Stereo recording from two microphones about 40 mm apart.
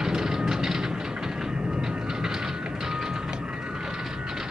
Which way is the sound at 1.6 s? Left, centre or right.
Centre.